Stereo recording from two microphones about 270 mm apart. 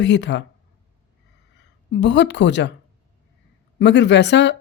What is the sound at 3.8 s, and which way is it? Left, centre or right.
Speech, left.